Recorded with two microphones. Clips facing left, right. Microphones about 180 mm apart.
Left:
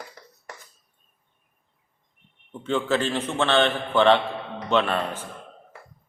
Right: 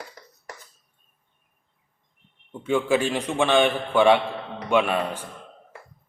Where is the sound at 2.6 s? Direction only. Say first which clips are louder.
Right 2 dB; 10° right (ahead or behind).